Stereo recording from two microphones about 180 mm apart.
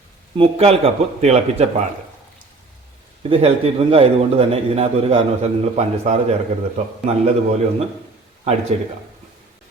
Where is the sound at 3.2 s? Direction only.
30° right (ahead or behind).